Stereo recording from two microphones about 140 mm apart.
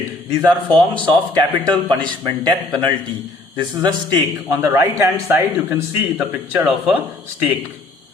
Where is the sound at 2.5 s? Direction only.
30° right (ahead or behind).